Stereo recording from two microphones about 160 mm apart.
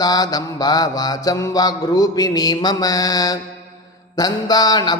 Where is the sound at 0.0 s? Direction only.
25° left (ahead or behind).